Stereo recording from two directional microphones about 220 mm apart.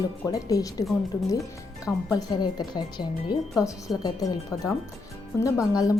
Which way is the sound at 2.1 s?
20° left (ahead or behind).